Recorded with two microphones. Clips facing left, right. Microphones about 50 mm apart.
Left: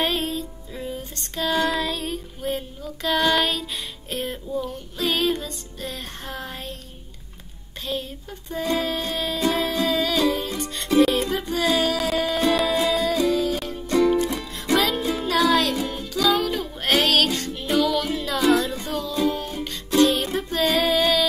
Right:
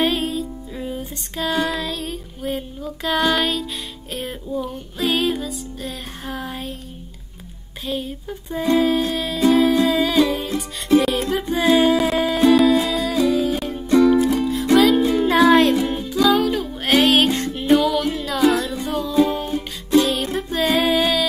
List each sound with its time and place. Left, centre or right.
0.0 s music: centre
7.8 s music: centre
11.6 s music: right
12.3 s music: centre
15.5 s music: right
16.3 s music: centre
17.1 s music: right
17.6 s music: centre